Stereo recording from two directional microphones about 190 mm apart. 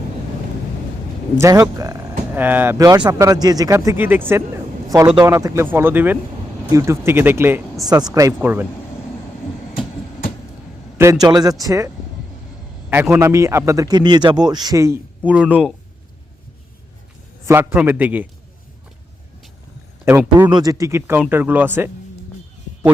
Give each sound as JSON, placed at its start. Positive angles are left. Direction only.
{"t": 1.4, "sound": "speech", "side_deg": -15}
{"t": 10.9, "sound": "speech", "side_deg": -15}
{"t": 12.9, "sound": "speech", "side_deg": -10}
{"t": 17.4, "sound": "speech", "side_deg": -15}
{"t": 20.1, "sound": "speech", "side_deg": -10}